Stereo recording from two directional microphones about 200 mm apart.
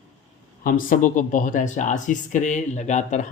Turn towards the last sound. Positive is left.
turn(degrees=35)  # may be behind; listen again after turning